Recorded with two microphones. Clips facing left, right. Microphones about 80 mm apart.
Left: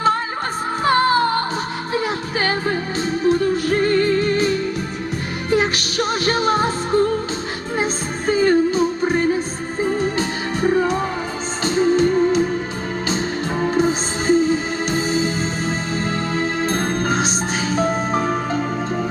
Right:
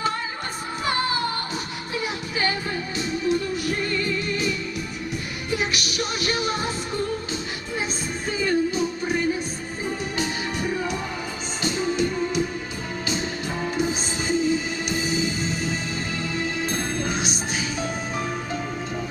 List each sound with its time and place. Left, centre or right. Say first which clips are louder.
0.9 s music: left 9 dB; left
8.3 s music: left 8 dB; left
13.6 s music: left 8 dB; left